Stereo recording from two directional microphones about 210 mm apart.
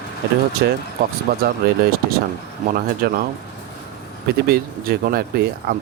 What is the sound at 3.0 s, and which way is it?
Speech, 45° right (ahead or behind).